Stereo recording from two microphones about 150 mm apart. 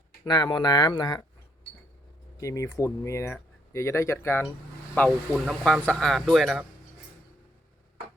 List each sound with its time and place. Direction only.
0.3 s speech: 30° left (ahead or behind)
2.4 s speech: 20° left (ahead or behind)
5.3 s speech: centre (ahead or behind)